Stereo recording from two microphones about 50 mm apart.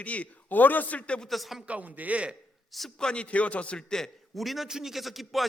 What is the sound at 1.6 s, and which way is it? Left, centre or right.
Speech, right.